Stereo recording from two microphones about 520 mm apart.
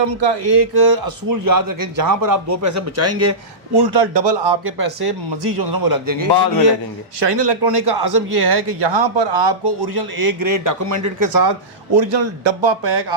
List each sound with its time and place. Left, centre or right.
0.2 s a man's voice: right
3.8 s a man's voice: right
7.2 s a man's voice: right
11.9 s a man's voice: right